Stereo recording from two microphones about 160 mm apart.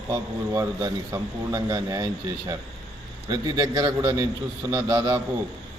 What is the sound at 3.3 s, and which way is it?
A man's voice, 25° right (ahead or behind).